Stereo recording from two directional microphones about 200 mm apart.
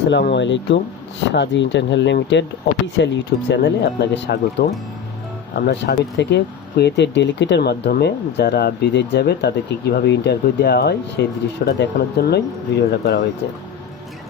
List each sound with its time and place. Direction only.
0.1 s speech: 60° left (ahead or behind)